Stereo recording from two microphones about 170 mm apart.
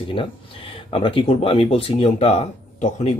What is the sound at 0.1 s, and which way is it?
Speech, 30° left (ahead or behind).